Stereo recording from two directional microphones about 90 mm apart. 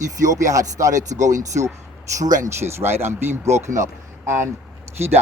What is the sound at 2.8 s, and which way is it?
Speech, 30° right (ahead or behind).